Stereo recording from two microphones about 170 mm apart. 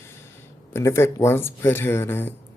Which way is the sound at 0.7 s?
15° left (ahead or behind).